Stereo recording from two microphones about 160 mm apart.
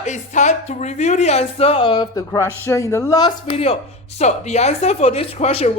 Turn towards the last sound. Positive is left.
turn(degrees=40)  # may be behind; listen again after turning